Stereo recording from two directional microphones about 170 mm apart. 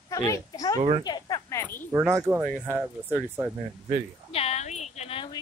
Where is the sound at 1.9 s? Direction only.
15° right (ahead or behind).